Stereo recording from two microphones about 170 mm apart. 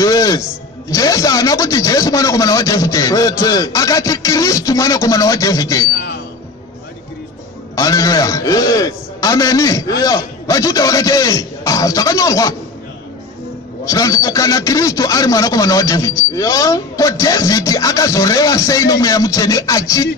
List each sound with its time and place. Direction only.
0.0 s speech: 20° left (ahead or behind)
5.9 s speech: 80° left
7.7 s speech: 20° left (ahead or behind)
13.8 s speech: 20° left (ahead or behind)